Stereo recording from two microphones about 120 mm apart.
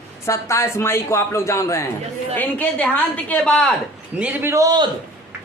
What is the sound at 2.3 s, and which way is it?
A woman's voice, 15° left (ahead or behind).